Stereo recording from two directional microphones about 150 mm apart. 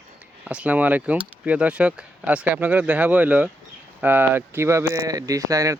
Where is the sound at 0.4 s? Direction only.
10° right (ahead or behind).